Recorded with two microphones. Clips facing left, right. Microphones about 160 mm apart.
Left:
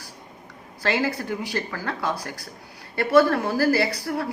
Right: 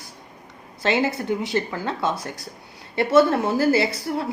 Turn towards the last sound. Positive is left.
turn(degrees=-20)  # may be behind; listen again after turning